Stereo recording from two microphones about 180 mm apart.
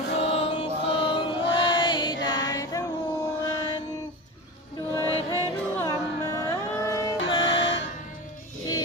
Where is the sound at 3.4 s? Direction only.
20° left (ahead or behind).